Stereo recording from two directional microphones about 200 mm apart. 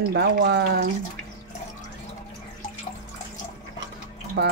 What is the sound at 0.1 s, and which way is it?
Speech, 55° right (ahead or behind).